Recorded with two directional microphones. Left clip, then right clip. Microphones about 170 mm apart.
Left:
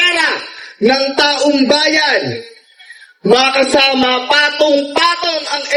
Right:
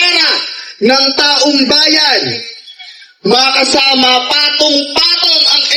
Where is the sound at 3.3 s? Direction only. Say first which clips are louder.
Right 1 dB; 45° left (ahead or behind).